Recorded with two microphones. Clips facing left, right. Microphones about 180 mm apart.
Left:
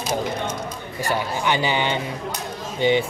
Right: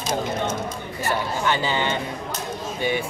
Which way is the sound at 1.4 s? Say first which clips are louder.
Left 2 dB; 15° left (ahead or behind).